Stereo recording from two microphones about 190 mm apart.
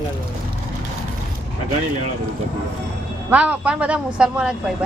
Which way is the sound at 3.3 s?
5° right (ahead or behind).